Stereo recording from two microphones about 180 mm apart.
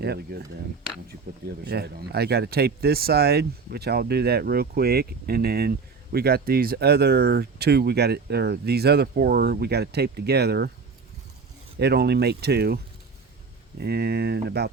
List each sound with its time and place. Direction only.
0.0 s speech: 65° right (ahead or behind)
1.6 s speech: 60° right (ahead or behind)
11.8 s speech: 65° right (ahead or behind)